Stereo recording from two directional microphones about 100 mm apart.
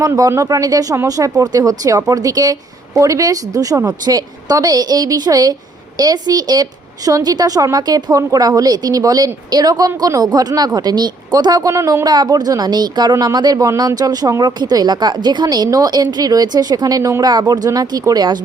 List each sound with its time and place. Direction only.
0.0 s a woman's voice: 35° right (ahead or behind)
11.7 s speech: 30° right (ahead or behind)
12.0 s a woman's voice: 45° right (ahead or behind)